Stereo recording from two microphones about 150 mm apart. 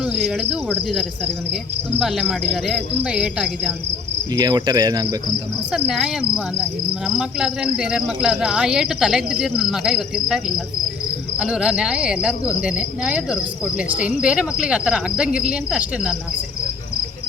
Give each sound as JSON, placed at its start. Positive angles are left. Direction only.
{"t": 0.0, "sound": "speech", "side_deg": -5}
{"t": 4.4, "sound": "cricket", "side_deg": -25}
{"t": 5.7, "sound": "speech", "side_deg": -5}
{"t": 12.6, "sound": "cricket", "side_deg": -5}
{"t": 14.0, "sound": "speech", "side_deg": -5}